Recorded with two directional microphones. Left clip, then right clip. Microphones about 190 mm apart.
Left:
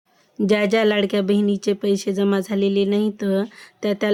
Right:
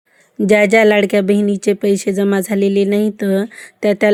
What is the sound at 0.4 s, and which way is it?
Speech, 25° right (ahead or behind).